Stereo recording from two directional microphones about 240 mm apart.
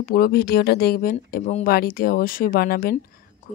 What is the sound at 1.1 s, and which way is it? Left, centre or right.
Speech, left.